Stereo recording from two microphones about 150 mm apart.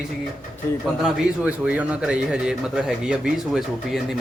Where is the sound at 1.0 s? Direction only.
5° right (ahead or behind).